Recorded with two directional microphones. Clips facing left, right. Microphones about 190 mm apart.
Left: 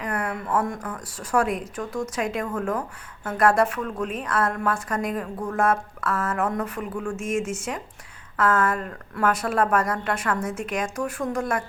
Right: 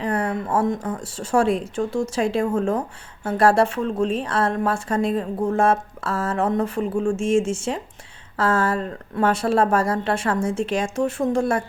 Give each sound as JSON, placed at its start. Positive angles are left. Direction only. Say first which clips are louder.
{"t": 0.0, "sound": "speech", "louder": "right 5 dB", "side_deg": -30}